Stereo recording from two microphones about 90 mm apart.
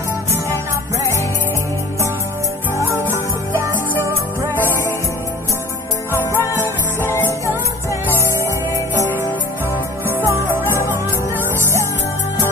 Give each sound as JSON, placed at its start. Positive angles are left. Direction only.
{"t": 3.6, "sound": "music", "side_deg": -35}
{"t": 4.6, "sound": "music", "side_deg": 20}
{"t": 6.1, "sound": "music", "side_deg": 30}
{"t": 10.0, "sound": "music", "side_deg": -25}